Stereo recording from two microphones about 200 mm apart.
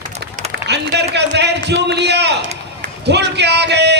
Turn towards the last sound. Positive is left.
turn(degrees=-55)  # may be behind; listen again after turning